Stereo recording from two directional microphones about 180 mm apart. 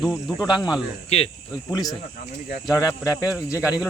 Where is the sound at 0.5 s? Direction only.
25° left (ahead or behind).